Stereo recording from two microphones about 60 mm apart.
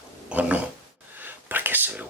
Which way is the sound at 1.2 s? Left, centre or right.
Right.